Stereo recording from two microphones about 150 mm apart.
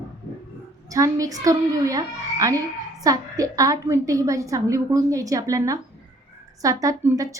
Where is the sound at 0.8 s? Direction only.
20° right (ahead or behind).